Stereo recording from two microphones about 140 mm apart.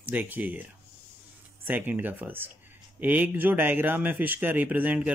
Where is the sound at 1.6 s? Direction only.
15° right (ahead or behind).